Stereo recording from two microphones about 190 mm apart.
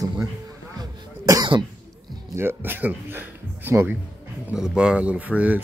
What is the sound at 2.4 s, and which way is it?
Speech, 10° right (ahead or behind).